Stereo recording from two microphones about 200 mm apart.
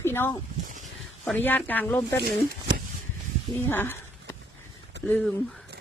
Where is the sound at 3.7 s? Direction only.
10° left (ahead or behind).